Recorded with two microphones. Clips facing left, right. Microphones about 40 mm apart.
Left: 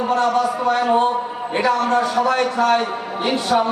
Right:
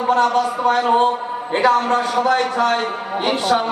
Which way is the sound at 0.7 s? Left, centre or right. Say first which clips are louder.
Right 2 dB; right.